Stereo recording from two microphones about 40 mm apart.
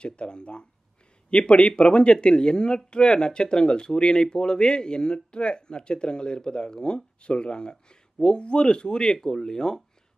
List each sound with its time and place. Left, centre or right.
0.0 s speech: left